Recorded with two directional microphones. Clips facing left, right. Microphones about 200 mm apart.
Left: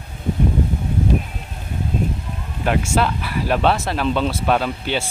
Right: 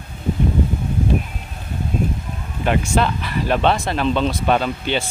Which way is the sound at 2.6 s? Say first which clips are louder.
Right 1 dB; 5° left (ahead or behind).